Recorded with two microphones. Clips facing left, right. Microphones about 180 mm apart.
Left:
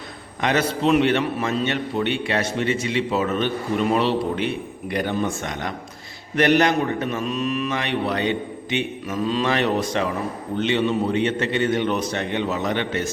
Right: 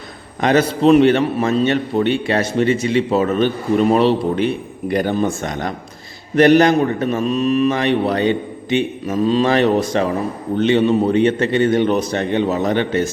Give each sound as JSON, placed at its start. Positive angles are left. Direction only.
{"t": 0.4, "sound": "a man's voice", "side_deg": -35}